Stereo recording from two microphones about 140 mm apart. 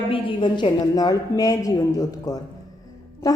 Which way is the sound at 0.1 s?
35° left (ahead or behind).